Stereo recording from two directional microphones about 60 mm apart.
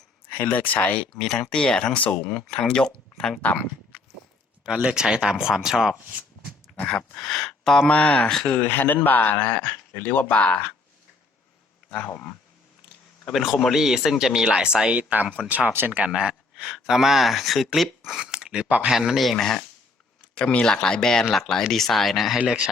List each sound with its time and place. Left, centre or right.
0.5 s speech: left
2.0 s speech: left
2.3 s speech: centre
3.4 s speech: left
4.8 s speech: centre
7.2 s speech: centre
8.4 s speech: left
13.3 s speech: centre
14.9 s speech: right
15.9 s speech: right; by 19.6 s centre
20.3 s speech: centre
22.4 s speech: centre